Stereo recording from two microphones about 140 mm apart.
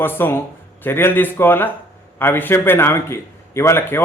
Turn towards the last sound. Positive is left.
turn(degrees=20)  # may be behind; listen again after turning